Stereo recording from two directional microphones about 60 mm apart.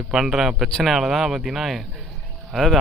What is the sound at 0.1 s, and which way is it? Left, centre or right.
Speech, centre.